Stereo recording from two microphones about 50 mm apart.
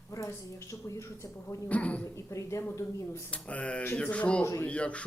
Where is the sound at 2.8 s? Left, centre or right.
Left.